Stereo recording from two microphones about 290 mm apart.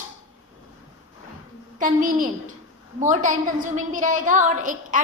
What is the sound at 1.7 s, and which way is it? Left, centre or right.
A woman's voice, right.